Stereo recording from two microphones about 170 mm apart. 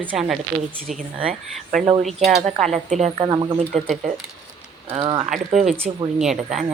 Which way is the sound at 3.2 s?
25° right (ahead or behind).